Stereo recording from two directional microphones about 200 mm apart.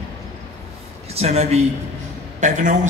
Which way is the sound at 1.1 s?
30° right (ahead or behind).